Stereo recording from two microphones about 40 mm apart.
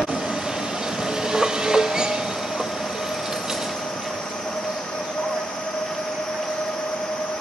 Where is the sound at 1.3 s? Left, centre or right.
Centre.